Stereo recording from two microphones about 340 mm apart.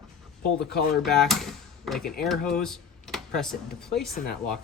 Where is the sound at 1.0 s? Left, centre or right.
Centre.